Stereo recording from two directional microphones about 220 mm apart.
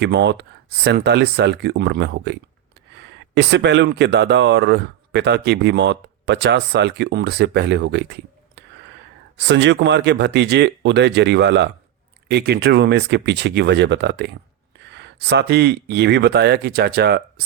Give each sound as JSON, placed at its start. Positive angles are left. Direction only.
{"t": 0.0, "sound": "speech", "side_deg": -50}